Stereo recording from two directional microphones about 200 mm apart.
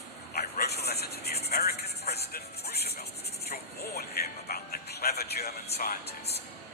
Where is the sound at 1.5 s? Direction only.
50° left (ahead or behind).